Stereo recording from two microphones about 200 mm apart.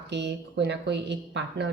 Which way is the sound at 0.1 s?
60° right (ahead or behind).